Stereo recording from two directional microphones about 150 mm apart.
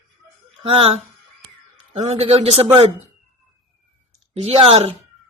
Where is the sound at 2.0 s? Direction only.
45° right (ahead or behind).